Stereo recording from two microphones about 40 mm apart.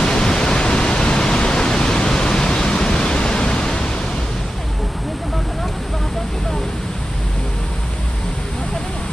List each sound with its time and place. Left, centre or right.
0.0 s pink noise: centre